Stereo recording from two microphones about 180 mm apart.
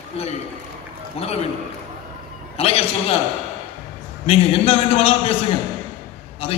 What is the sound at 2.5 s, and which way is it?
Speech, 30° left (ahead or behind).